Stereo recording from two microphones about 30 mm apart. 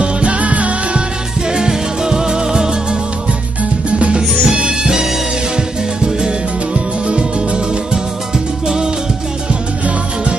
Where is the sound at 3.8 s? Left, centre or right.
Right.